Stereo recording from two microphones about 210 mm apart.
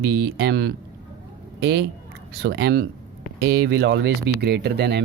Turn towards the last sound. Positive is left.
turn(degrees=-55)  # may be behind; listen again after turning